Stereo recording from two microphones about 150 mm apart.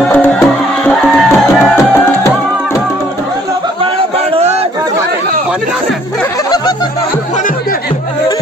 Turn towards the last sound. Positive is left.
turn(degrees=30)  # may be behind; listen again after turning